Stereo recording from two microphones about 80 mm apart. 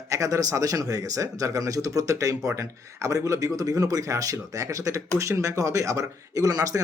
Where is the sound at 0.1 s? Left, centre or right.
Right.